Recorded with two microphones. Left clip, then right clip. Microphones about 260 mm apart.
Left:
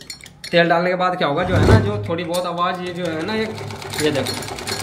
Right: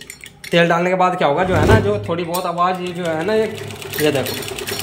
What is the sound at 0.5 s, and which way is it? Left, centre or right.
A man's voice, centre.